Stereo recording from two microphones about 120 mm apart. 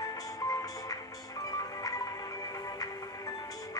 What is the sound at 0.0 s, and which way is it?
Music, 30° left (ahead or behind).